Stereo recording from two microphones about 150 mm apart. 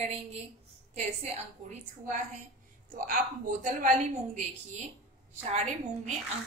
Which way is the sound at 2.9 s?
65° right (ahead or behind).